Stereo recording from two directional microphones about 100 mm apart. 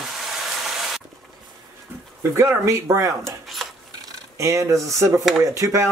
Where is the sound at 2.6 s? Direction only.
30° right (ahead or behind).